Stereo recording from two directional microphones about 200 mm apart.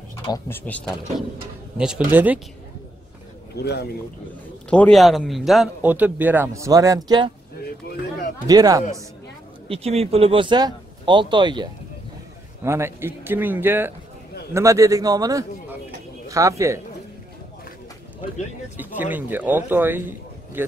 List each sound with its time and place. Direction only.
0.2 s speech: 20° left (ahead or behind)
0.7 s speech: 5° left (ahead or behind)
2.0 s a man's voice: 10° right (ahead or behind)
3.5 s speech: 55° left (ahead or behind)
4.6 s a man's voice: 5° left (ahead or behind); by 7.2 s 20° right (ahead or behind)
8.5 s speech: 20° right (ahead or behind)
9.7 s a man's voice: 30° right (ahead or behind); by 16.8 s 15° right (ahead or behind)
18.8 s a man's voice: 10° right (ahead or behind)